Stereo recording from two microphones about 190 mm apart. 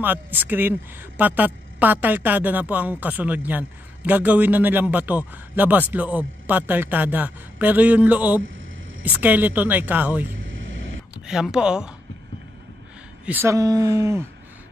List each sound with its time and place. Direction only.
0.0 s a woman's voice: 10° right (ahead or behind)
11.2 s speech: 5° right (ahead or behind)
13.2 s a woman's voice: 10° right (ahead or behind)